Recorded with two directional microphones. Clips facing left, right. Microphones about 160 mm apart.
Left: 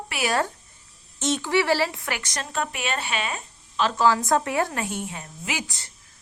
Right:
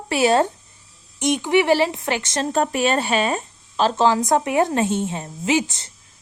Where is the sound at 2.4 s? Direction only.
40° right (ahead or behind).